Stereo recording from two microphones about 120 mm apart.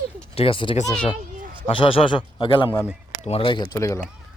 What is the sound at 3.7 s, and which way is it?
Speech, 25° left (ahead or behind).